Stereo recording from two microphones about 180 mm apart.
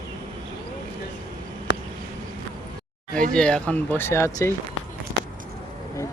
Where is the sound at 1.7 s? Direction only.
75° left (ahead or behind).